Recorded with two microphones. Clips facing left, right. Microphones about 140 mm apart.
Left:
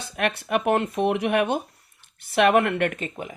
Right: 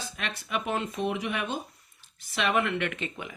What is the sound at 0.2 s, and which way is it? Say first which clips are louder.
Speech: left 10 dB; 60° left (ahead or behind).